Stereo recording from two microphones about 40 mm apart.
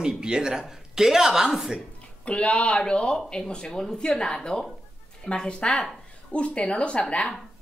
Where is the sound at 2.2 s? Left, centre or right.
Left.